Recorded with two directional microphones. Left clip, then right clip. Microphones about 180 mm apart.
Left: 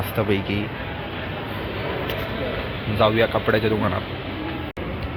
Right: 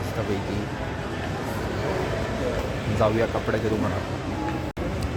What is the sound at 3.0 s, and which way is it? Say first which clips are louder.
Speech: left 4 dB; 5° left (ahead or behind).